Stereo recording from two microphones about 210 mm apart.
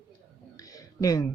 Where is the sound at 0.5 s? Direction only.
15° left (ahead or behind).